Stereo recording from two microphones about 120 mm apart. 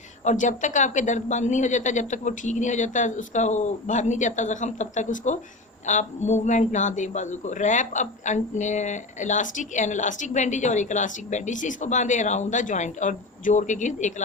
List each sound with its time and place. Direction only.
0.3 s a man's voice: 90° left